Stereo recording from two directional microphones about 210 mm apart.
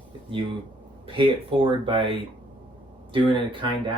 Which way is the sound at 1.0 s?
25° right (ahead or behind).